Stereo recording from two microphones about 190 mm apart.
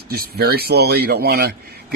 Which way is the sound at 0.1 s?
55° right (ahead or behind).